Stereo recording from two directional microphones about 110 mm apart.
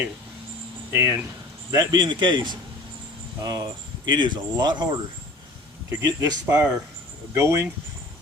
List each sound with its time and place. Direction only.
0.9 s speech: 25° right (ahead or behind)
1.7 s speech: 35° right (ahead or behind)
5.9 s speech: 25° right (ahead or behind)
6.4 s speech: 10° right (ahead or behind)
7.3 s speech: 25° right (ahead or behind)